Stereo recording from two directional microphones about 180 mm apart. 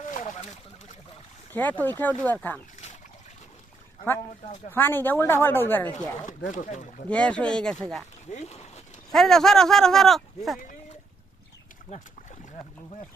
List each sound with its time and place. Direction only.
0.0 s a sound: 45° left (ahead or behind)
1.5 s speech: 10° left (ahead or behind)
4.7 s speech: 10° left (ahead or behind)
6.5 s speech: 40° left (ahead or behind)
7.1 s speech: 5° left (ahead or behind)
8.3 s speech: 40° left (ahead or behind)
9.1 s speech: centre (ahead or behind)